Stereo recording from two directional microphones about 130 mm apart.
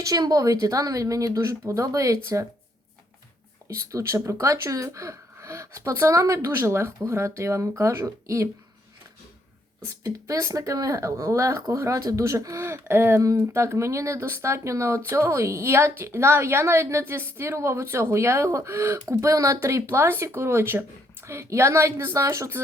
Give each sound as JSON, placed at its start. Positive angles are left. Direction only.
{"t": 0.0, "sound": "speech", "side_deg": -30}
{"t": 3.8, "sound": "speech", "side_deg": -20}
{"t": 9.8, "sound": "speech", "side_deg": -20}